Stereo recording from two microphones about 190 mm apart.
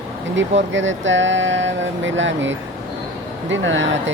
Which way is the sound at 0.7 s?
75° right (ahead or behind).